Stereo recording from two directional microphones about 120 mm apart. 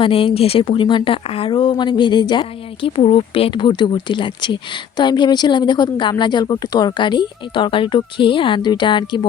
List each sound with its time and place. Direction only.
0.0 s speech: 50° left (ahead or behind)